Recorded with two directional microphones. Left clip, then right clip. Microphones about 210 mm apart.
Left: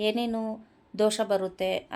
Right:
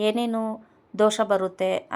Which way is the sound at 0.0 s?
10° right (ahead or behind).